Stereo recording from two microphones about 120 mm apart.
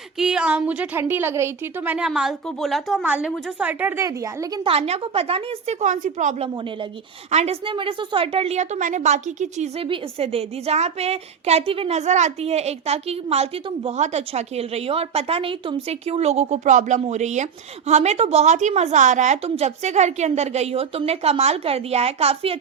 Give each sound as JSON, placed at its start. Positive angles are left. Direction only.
{"t": 0.2, "sound": "a woman's voice", "side_deg": -5}
{"t": 2.0, "sound": "a woman's voice", "side_deg": -5}
{"t": 3.7, "sound": "a woman's voice", "side_deg": -15}
{"t": 4.0, "sound": "a woman's voice", "side_deg": -25}
{"t": 4.6, "sound": "a woman's voice", "side_deg": -60}
{"t": 5.8, "sound": "a woman's voice", "side_deg": -90}
{"t": 6.6, "sound": "speech", "side_deg": -45}
{"t": 7.3, "sound": "a woman's voice", "side_deg": -60}
{"t": 9.8, "sound": "a woman's voice", "side_deg": -50}
{"t": 14.0, "sound": "a woman's voice", "side_deg": -65}